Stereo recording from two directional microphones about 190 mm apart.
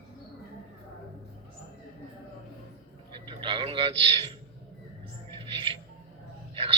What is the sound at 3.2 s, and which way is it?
A man's voice, 25° right (ahead or behind).